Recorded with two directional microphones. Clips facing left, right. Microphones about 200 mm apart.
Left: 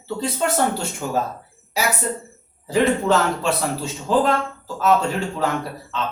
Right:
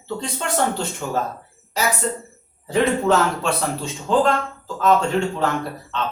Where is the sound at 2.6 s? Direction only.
Centre (ahead or behind).